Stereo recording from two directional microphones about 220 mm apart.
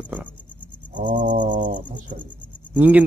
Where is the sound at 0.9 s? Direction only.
35° right (ahead or behind).